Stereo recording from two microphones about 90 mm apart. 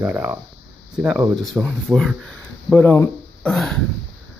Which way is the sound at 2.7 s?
25° left (ahead or behind).